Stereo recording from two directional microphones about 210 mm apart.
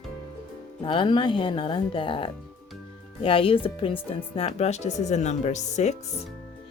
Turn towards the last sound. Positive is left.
turn(degrees=30)  # may be behind; listen again after turning